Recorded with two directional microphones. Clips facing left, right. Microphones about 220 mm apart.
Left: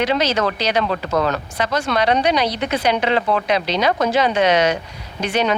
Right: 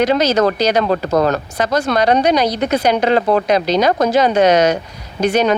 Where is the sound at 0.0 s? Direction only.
40° right (ahead or behind).